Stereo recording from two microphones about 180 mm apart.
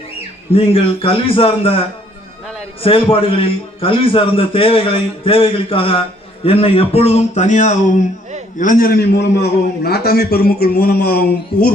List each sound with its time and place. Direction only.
0.5 s a man's voice: 30° left (ahead or behind); by 11.7 s 60° left (ahead or behind)